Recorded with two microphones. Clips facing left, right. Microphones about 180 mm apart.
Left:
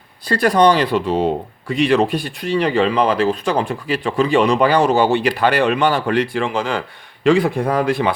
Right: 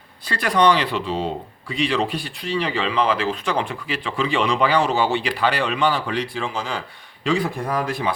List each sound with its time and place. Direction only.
0.3 s speech: 40° left (ahead or behind); by 8.1 s 65° left (ahead or behind)